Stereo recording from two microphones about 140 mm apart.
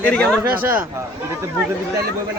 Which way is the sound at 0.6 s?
15° right (ahead or behind).